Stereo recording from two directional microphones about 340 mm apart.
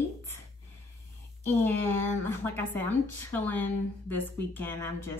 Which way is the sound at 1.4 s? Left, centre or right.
Centre.